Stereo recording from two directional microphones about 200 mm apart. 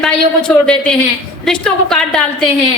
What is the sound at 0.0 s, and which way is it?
A woman's voice, 5° left (ahead or behind).